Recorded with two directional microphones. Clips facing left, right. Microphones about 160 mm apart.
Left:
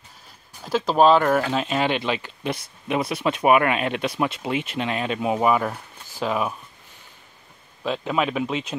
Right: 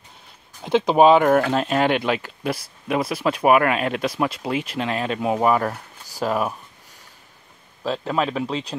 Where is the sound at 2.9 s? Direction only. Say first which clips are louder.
Right 1 dB; 5° right (ahead or behind).